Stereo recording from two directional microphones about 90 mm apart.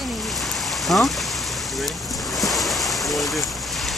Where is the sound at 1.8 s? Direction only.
Centre (ahead or behind).